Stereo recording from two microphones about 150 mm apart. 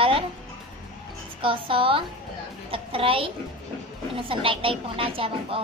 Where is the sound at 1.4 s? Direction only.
35° right (ahead or behind).